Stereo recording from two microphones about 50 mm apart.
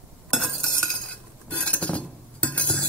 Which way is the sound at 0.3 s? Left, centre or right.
Centre.